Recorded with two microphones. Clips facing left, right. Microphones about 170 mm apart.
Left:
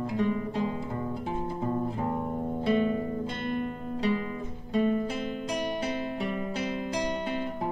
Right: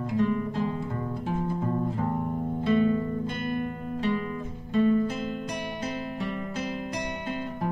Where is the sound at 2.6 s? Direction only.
20° left (ahead or behind).